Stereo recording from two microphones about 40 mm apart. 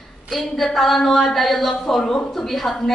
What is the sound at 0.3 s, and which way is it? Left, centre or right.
A woman's voice, centre.